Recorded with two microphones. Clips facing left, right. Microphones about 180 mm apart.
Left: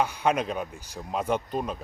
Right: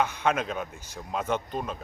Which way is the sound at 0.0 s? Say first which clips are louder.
Left 1 dB; 10° left (ahead or behind).